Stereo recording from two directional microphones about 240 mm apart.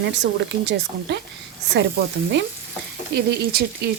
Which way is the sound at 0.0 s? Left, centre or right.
Right.